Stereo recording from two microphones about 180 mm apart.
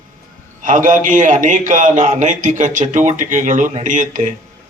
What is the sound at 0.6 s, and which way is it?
A man's voice, 45° right (ahead or behind).